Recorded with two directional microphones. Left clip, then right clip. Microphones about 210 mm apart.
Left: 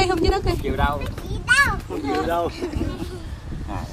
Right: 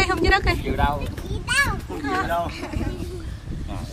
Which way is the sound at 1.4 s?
10° left (ahead or behind).